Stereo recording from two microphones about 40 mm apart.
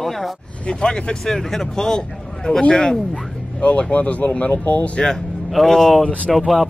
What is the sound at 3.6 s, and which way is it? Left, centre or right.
Speech, left.